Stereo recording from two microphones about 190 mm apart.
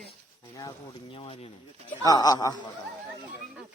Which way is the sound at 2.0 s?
20° left (ahead or behind).